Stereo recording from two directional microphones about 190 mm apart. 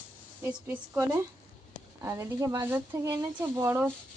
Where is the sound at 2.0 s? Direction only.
15° right (ahead or behind).